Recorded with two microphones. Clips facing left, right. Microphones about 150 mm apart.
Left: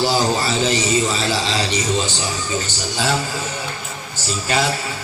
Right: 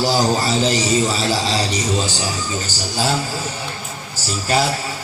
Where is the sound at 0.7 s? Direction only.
40° right (ahead or behind).